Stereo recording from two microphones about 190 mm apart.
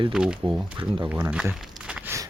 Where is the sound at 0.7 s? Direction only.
25° right (ahead or behind).